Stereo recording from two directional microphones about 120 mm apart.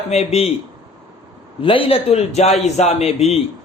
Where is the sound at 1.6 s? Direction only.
50° left (ahead or behind).